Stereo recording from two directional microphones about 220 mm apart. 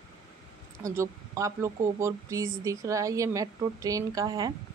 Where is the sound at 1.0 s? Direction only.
15° right (ahead or behind).